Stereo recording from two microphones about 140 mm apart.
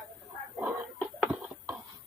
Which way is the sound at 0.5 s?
15° right (ahead or behind).